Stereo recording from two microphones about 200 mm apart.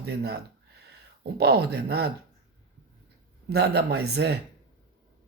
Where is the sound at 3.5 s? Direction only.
55° right (ahead or behind).